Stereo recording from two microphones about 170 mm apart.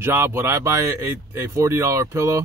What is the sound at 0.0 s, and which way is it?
Speech, 15° right (ahead or behind).